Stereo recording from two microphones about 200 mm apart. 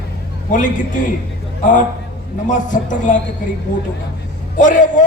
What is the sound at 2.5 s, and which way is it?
Speech, 40° left (ahead or behind).